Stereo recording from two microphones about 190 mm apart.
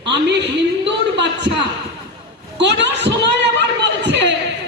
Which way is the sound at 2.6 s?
65° right (ahead or behind).